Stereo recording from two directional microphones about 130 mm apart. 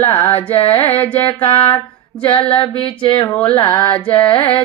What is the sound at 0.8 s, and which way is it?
Speech, 15° left (ahead or behind).